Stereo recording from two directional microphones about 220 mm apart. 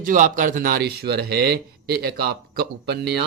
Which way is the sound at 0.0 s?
35° right (ahead or behind).